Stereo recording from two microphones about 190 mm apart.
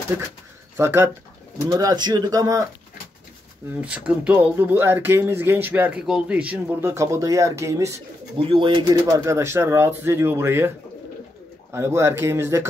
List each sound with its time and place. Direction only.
0.7 s speech: 15° right (ahead or behind)
3.8 s speech: 5° right (ahead or behind)
8.4 s speech: 30° right (ahead or behind); by 10.7 s 10° right (ahead or behind)
11.7 s speech: 15° right (ahead or behind)